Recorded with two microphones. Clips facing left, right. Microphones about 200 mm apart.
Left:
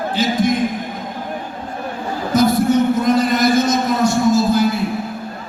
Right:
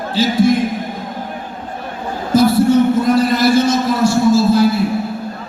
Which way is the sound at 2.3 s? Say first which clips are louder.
Right 3 dB; 30° right (ahead or behind).